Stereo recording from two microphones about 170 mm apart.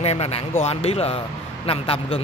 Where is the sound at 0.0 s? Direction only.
35° left (ahead or behind).